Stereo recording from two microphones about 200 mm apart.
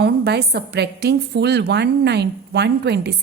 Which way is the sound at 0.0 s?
55° right (ahead or behind).